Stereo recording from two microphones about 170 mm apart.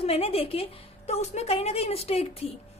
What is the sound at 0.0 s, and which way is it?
A woman's voice, 35° left (ahead or behind).